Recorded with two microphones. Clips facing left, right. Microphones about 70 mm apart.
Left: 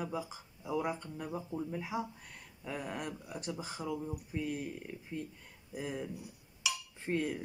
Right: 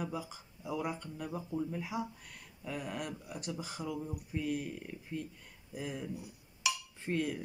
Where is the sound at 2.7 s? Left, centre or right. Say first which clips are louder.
Even; left.